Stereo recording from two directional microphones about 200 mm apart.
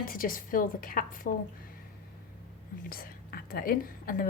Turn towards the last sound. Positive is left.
turn(degrees=45)  # may be behind; listen again after turning